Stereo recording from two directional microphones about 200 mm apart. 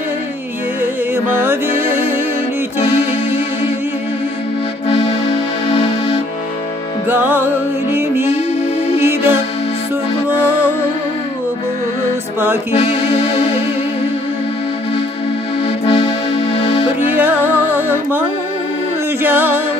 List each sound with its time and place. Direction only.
1.1 s music: 10° right (ahead or behind)
5.7 s music: 25° left (ahead or behind)
7.1 s music: 10° right (ahead or behind)
8.9 s music: 10° right (ahead or behind)
12.7 s music: 30° left (ahead or behind)
15.8 s music: 25° left (ahead or behind)
17.2 s music: 10° right (ahead or behind)
19.2 s music: 10° right (ahead or behind)